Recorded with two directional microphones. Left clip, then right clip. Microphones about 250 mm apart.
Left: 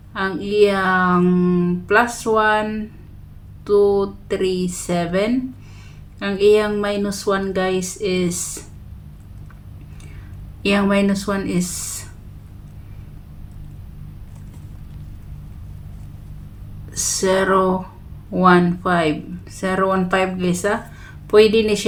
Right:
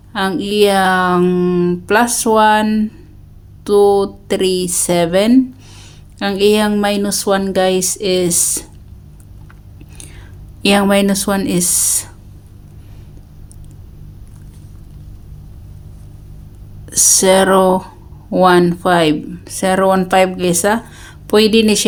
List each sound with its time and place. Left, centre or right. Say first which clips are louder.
0.1 s speech: right 4 dB; right
10.6 s speech: right 6 dB; right
16.9 s speech: right 8 dB; right